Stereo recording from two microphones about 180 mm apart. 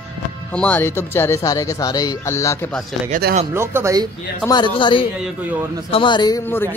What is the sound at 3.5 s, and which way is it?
Speech, 15° right (ahead or behind).